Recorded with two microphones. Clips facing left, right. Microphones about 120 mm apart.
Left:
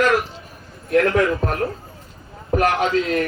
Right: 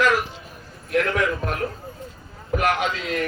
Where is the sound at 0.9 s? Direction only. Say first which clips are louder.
Left 5 dB; 35° left (ahead or behind).